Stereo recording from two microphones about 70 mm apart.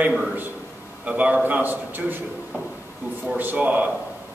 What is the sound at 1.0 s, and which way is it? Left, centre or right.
A man's voice, centre.